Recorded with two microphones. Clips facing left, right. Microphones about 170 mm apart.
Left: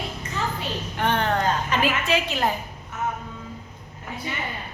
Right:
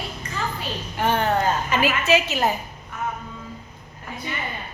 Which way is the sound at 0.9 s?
5° right (ahead or behind).